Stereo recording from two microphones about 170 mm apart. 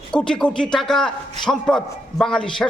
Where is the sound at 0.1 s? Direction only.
5° left (ahead or behind).